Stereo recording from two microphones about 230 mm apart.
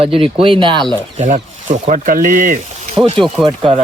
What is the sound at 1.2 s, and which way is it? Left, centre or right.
Speech, right.